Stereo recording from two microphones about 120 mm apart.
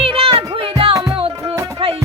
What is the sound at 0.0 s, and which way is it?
Music, 50° right (ahead or behind).